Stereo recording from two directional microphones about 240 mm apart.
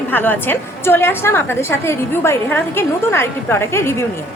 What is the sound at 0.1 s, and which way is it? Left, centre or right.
A woman's voice, centre.